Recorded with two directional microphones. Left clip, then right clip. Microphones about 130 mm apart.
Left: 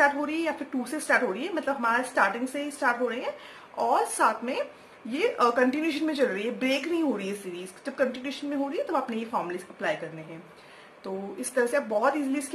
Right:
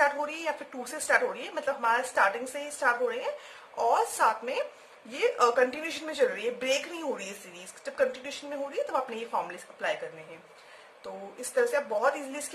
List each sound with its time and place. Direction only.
0.0 s a woman's voice: 45° right (ahead or behind)
11.5 s a woman's voice: 45° right (ahead or behind)